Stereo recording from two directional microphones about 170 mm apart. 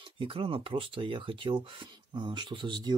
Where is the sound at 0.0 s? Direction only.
30° right (ahead or behind).